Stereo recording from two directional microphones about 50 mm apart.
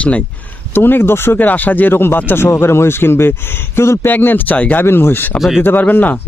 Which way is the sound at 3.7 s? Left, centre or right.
Left.